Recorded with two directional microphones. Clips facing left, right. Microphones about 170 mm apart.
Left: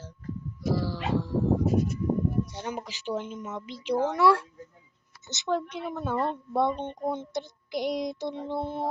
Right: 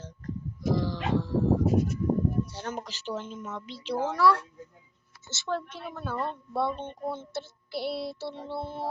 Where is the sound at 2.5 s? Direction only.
15° left (ahead or behind).